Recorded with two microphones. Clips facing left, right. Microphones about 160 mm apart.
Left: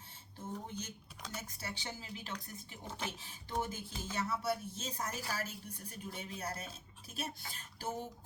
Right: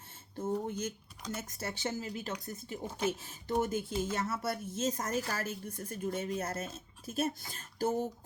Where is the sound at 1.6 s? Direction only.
50° right (ahead or behind).